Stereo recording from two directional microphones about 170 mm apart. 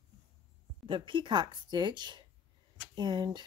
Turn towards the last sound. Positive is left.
turn(degrees=-25)  # may be behind; listen again after turning